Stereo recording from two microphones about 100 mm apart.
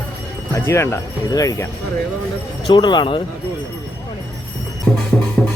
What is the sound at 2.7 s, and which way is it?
Speech, 50° left (ahead or behind).